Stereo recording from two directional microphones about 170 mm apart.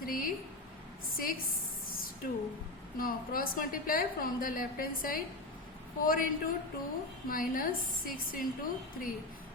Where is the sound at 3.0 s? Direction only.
55° left (ahead or behind).